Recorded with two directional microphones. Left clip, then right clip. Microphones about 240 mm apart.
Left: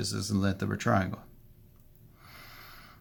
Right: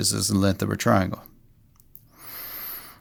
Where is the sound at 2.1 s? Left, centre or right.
Right.